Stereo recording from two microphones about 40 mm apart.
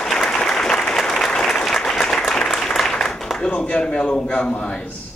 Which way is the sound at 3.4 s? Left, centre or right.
Left.